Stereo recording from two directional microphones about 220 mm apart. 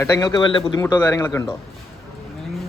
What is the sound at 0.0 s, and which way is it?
Speech, 15° left (ahead or behind).